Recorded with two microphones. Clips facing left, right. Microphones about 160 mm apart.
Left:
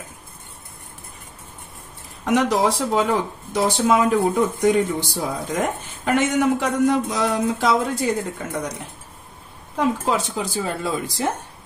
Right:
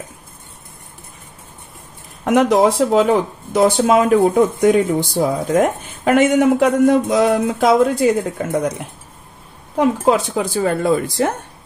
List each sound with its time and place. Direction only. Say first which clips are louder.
2.2 s speech: right 6 dB; 55° right (ahead or behind)
9.8 s speech: right 6 dB; 55° right (ahead or behind)